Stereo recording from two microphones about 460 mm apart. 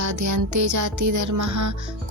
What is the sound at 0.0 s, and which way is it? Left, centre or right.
Speech, right.